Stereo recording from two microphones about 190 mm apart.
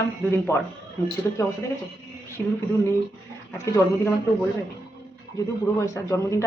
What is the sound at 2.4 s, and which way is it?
Speech, 10° left (ahead or behind).